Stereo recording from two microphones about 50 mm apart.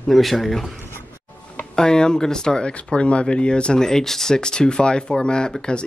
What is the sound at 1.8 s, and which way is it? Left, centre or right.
Speech, centre.